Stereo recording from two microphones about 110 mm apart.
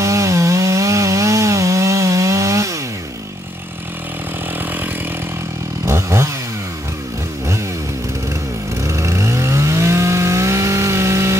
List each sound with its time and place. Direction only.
0.0 s chainsaw: 30° right (ahead or behind)
5.9 s chainsaw: 25° right (ahead or behind)
8.8 s chainsaw: 25° right (ahead or behind)